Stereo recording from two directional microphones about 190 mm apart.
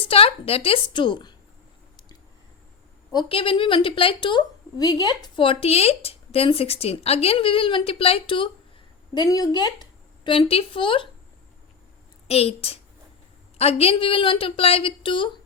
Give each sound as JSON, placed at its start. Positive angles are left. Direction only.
{"t": 0.0, "sound": "a woman's voice", "side_deg": 30}
{"t": 3.1, "sound": "a woman's voice", "side_deg": 25}
{"t": 12.3, "sound": "a woman's voice", "side_deg": 30}